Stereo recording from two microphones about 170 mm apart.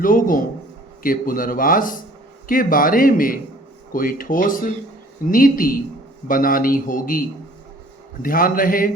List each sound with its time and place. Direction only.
0.0 s speech: 55° left (ahead or behind)